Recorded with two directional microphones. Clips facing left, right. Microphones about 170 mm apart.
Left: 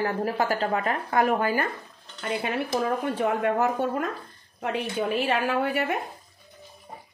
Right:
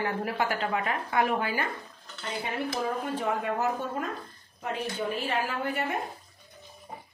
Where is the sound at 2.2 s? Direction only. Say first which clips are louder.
Left 5 dB; 65° left (ahead or behind).